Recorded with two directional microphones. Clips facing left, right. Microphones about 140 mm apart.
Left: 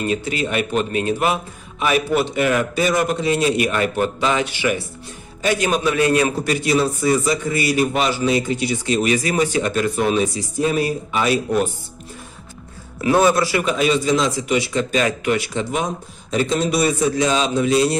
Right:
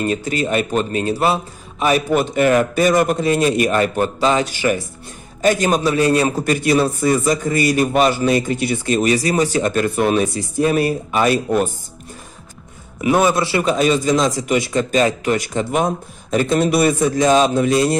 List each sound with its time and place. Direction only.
0.0 s a man's voice: 40° right (ahead or behind)
13.0 s a man's voice: 20° right (ahead or behind); by 17.9 s 50° right (ahead or behind)